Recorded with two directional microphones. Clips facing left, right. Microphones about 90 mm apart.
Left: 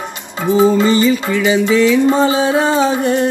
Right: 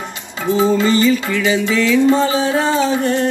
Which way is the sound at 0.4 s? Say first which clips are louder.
Left 3 dB; 25° left (ahead or behind).